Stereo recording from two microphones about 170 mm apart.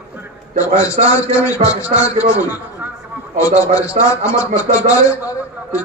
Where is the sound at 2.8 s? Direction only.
10° right (ahead or behind).